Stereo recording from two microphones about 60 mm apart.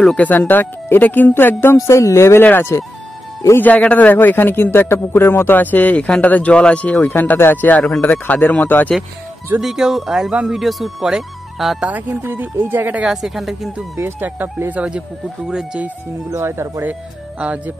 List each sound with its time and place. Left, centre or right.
0.1 s speech: left
3.5 s a man's voice: left
9.6 s speech: centre
12.1 s speech: right
13.0 s speech: centre
14.0 s speech: right
14.7 s speech: centre
16.3 s speech: right
17.4 s speech: right